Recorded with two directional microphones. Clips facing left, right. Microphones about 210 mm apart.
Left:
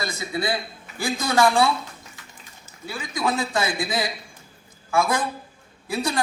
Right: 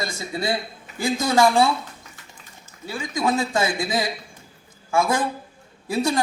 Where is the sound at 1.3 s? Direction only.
25° right (ahead or behind).